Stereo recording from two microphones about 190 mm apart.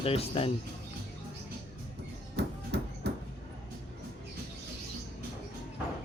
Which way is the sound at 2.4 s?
65° right (ahead or behind).